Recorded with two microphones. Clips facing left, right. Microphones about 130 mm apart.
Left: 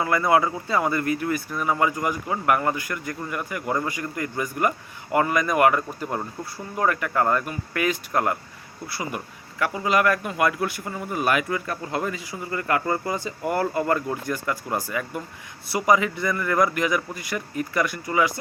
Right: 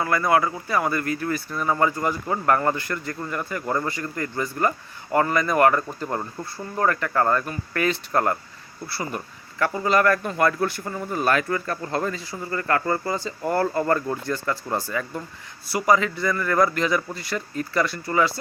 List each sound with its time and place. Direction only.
0.0 s speech: 20° left (ahead or behind)